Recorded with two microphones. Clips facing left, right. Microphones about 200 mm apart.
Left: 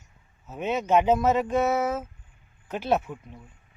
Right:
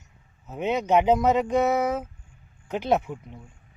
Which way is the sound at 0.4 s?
15° right (ahead or behind).